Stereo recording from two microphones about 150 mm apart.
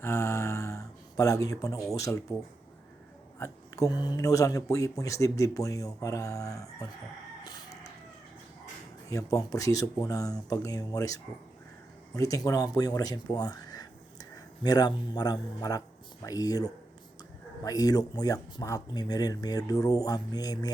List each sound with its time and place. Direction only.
0.0 s a sound: 15° left (ahead or behind)
1.9 s speech: 20° left (ahead or behind)
3.3 s speech: 20° left (ahead or behind)
7.4 s crowing: 20° left (ahead or behind)
9.0 s speech: 20° left (ahead or behind)